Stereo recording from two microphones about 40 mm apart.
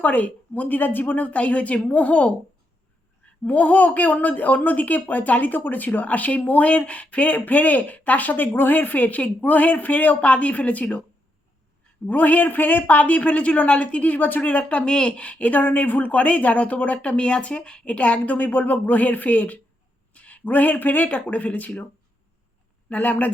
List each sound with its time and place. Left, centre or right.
0.0 s speech: left
3.4 s speech: left
7.3 s speech: left
8.5 s speech: left
12.0 s speech: left
14.7 s speech: left
15.2 s speech: left
15.6 s speech: left
22.9 s speech: left